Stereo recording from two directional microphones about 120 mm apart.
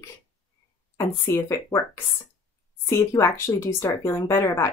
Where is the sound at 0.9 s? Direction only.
20° left (ahead or behind).